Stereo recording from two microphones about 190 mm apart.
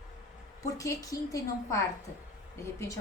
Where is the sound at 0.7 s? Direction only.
15° left (ahead or behind).